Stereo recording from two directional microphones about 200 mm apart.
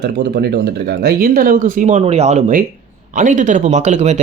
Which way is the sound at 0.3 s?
55° right (ahead or behind).